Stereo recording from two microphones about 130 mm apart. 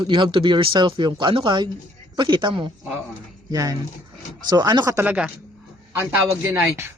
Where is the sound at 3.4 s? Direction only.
25° right (ahead or behind).